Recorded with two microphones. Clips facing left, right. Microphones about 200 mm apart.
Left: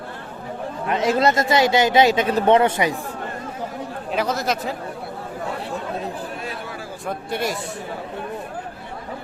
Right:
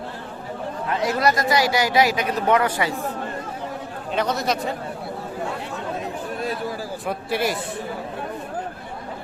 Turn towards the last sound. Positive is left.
turn(degrees=0)  # may be behind; listen again after turning